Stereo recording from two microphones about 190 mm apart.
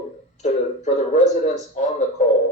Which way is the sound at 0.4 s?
35° left (ahead or behind).